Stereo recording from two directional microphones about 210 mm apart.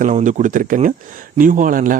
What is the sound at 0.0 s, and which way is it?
Speech, 35° right (ahead or behind).